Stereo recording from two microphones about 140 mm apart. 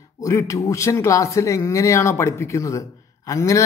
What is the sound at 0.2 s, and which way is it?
Speech, 20° left (ahead or behind).